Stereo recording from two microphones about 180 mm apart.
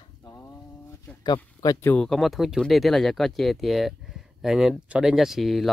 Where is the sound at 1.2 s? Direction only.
20° left (ahead or behind).